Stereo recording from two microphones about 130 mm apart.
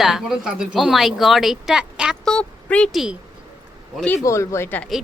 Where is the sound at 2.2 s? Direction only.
5° left (ahead or behind).